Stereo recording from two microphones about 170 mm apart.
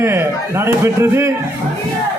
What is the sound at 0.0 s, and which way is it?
Speech, 15° right (ahead or behind).